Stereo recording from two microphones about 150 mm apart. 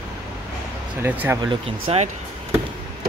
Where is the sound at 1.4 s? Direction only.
35° right (ahead or behind).